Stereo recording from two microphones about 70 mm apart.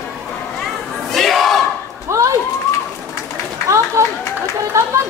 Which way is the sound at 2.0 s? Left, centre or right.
Right.